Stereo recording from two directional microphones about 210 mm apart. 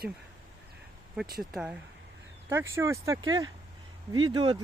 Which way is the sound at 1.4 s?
5° right (ahead or behind).